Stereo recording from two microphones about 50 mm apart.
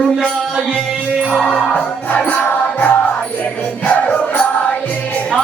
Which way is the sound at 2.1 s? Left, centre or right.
Left.